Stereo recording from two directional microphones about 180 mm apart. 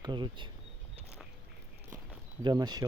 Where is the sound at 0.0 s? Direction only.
25° right (ahead or behind).